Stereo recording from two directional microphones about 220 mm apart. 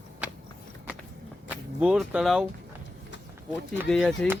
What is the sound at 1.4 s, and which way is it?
Speech, 5° right (ahead or behind).